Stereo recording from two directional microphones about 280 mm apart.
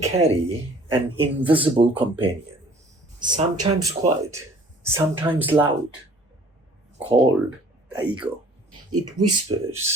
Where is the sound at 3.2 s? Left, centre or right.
Centre.